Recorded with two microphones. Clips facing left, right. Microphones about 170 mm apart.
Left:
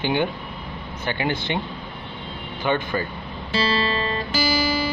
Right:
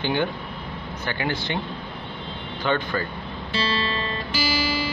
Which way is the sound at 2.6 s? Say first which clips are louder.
Left 1 dB; 15° left (ahead or behind).